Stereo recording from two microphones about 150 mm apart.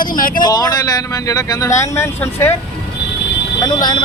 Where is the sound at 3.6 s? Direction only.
30° left (ahead or behind).